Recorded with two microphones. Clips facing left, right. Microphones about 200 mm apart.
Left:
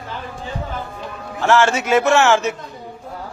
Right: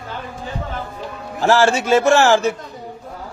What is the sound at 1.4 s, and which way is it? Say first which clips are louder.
A man's voice: right 1 dB; 35° right (ahead or behind).